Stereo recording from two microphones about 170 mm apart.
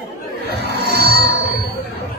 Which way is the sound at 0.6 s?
75° right (ahead or behind).